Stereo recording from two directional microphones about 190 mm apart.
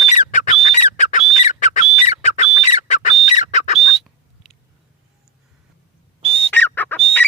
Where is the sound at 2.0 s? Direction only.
35° left (ahead or behind).